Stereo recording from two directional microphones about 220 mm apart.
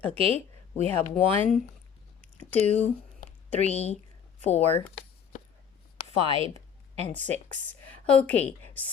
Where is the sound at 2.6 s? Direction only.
30° left (ahead or behind).